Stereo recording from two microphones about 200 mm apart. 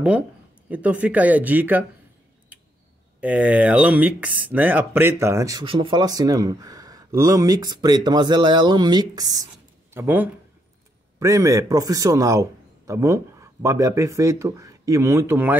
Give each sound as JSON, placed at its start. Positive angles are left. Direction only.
{"t": 0.7, "sound": "speech", "side_deg": -5}
{"t": 2.5, "sound": "a sound", "side_deg": -5}
{"t": 3.2, "sound": "a man's voice", "side_deg": -10}